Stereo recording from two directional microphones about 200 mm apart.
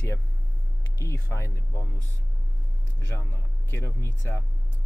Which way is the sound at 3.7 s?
15° left (ahead or behind).